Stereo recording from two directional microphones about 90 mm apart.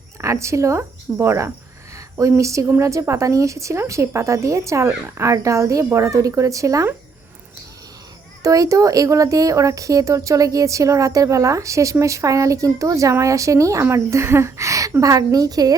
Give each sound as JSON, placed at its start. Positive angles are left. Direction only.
{"t": 0.2, "sound": "speech", "side_deg": -35}
{"t": 8.4, "sound": "speech", "side_deg": -40}